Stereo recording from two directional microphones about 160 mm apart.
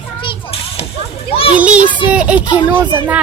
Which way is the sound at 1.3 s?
35° left (ahead or behind).